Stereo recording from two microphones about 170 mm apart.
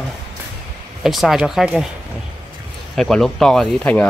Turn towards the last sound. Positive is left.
turn(degrees=10)  # may be behind; listen again after turning